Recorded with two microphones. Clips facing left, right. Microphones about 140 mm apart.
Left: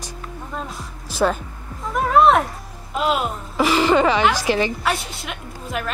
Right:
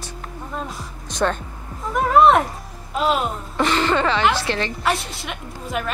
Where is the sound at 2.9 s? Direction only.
Centre (ahead or behind).